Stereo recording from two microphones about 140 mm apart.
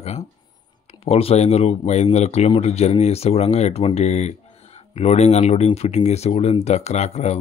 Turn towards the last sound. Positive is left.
turn(degrees=50)  # may be behind; listen again after turning